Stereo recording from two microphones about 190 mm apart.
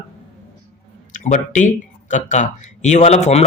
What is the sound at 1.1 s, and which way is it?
A man's voice, 40° left (ahead or behind).